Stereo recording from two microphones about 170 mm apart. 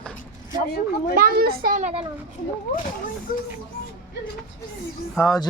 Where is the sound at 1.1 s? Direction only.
60° right (ahead or behind).